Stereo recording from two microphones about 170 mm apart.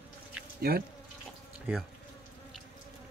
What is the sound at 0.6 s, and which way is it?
Speech, 65° right (ahead or behind).